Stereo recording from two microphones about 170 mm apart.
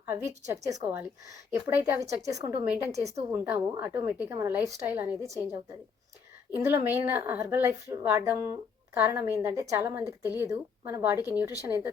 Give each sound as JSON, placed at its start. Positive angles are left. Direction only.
{"t": 0.0, "sound": "a woman's voice", "side_deg": -15}
{"t": 2.6, "sound": "a woman's voice", "side_deg": -5}
{"t": 2.9, "sound": "a woman's voice", "side_deg": -40}
{"t": 3.3, "sound": "a woman's voice", "side_deg": -10}
{"t": 6.5, "sound": "a woman's voice", "side_deg": -15}